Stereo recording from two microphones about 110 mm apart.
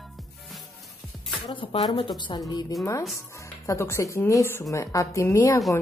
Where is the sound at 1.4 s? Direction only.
50° left (ahead or behind).